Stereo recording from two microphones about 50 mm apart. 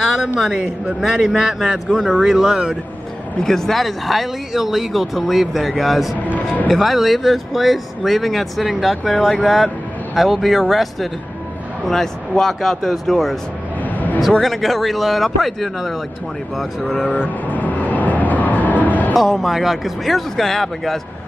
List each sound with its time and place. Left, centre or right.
0.7 s a man's voice: centre
3.4 s speech: centre
6.2 s speech: left
6.7 s speech: centre
13.8 s a sound: left
14.4 s speech: centre
17.1 s vehicle: left
18.9 s music: left
19.1 s speech: centre